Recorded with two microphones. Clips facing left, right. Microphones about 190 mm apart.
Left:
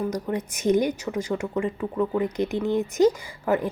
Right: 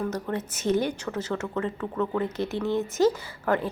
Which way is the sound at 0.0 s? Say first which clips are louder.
Left 2 dB; 10° left (ahead or behind).